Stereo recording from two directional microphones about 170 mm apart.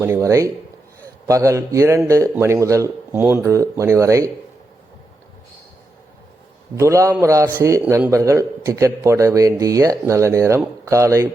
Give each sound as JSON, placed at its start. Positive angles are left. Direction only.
{"t": 0.0, "sound": "a man's voice", "side_deg": -15}
{"t": 6.7, "sound": "a man's voice", "side_deg": -15}